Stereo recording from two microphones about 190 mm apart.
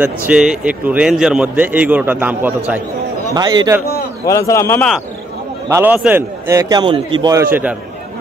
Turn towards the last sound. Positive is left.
turn(degrees=-20)  # may be behind; listen again after turning